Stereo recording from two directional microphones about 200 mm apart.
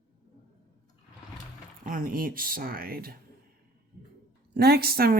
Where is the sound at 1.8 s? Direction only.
45° right (ahead or behind).